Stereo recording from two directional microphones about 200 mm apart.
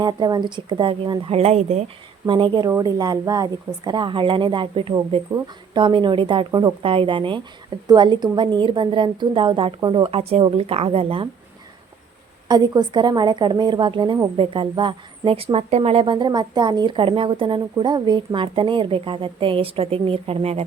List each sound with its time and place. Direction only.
0.0 s a woman's voice: 20° right (ahead or behind)
12.5 s a woman's voice: 20° right (ahead or behind)